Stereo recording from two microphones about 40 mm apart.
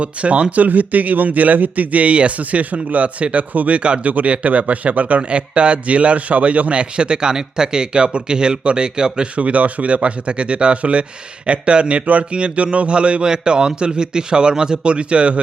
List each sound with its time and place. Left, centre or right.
0.0 s speech: right
0.5 s speech: right
3.8 s a man's voice: right
4.1 s a man's voice: right
9.4 s a man's voice: right